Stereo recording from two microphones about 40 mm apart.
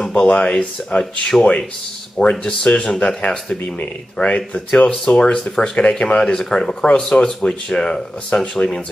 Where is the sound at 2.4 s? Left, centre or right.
Left.